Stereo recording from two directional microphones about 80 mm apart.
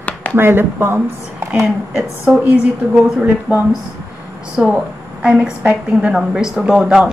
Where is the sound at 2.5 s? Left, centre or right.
Centre.